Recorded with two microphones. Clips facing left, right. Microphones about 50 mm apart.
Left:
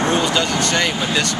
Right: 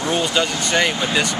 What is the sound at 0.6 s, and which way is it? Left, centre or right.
Speech, centre.